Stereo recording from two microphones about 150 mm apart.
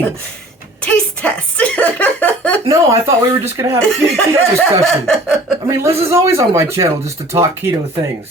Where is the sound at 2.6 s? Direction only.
20° right (ahead or behind).